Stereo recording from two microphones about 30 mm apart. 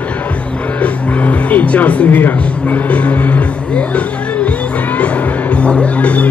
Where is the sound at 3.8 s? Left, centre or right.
Left.